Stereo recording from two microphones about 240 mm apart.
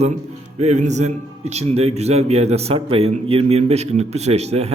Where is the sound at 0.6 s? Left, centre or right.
Right.